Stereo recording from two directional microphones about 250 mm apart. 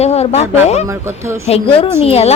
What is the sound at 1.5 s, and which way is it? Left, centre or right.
Speech, left.